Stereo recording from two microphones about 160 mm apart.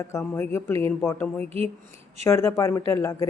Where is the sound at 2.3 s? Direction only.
20° left (ahead or behind).